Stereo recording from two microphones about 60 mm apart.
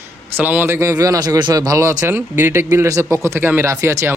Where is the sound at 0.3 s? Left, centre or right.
Right.